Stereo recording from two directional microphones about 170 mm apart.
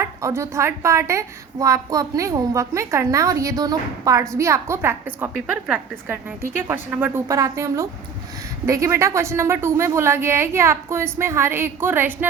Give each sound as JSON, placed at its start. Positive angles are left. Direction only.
{"t": 0.0, "sound": "a woman's voice", "side_deg": -15}